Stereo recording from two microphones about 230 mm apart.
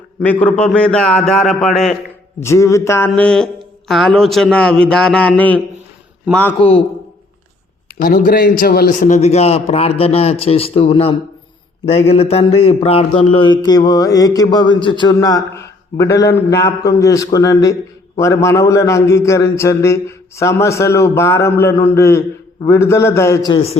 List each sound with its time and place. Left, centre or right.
0.4 s speech: centre
2.4 s a man's voice: centre
8.0 s a man's voice: left